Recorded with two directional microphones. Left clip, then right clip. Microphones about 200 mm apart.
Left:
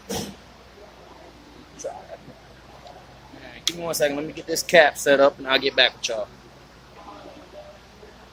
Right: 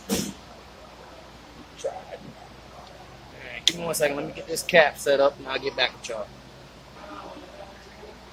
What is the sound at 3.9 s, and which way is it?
Speech, 15° left (ahead or behind).